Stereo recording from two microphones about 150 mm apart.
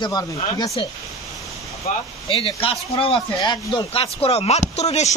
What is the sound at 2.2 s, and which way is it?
Speech, 35° left (ahead or behind).